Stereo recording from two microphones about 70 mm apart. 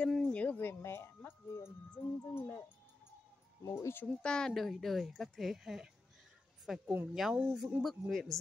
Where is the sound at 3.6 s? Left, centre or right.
Left.